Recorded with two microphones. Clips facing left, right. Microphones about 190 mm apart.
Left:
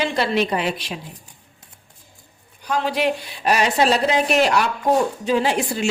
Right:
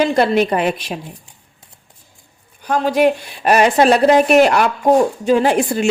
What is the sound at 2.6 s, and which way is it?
A woman's voice, 45° right (ahead or behind).